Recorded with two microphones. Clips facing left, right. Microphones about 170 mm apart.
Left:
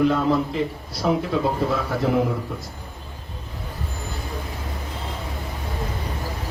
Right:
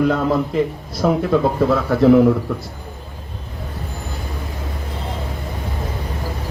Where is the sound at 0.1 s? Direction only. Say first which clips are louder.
Right 3 dB; 50° right (ahead or behind).